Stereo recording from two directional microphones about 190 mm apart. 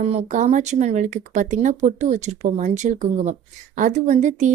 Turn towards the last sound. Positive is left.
turn(degrees=-40)  # may be behind; listen again after turning